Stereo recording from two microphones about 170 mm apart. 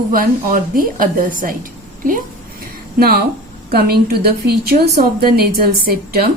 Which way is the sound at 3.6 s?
65° right (ahead or behind).